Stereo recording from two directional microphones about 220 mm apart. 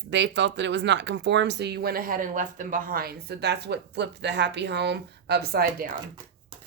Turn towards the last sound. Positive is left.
turn(degrees=-45)  # may be behind; listen again after turning